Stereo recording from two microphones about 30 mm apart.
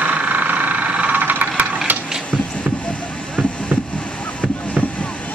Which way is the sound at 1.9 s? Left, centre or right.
Right.